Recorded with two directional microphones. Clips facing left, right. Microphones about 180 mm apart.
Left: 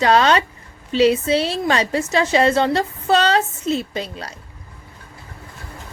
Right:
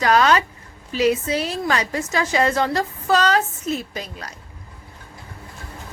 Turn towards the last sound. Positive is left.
turn(degrees=30)  # may be behind; listen again after turning